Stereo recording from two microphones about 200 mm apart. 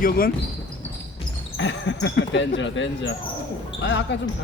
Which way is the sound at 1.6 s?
65° left (ahead or behind).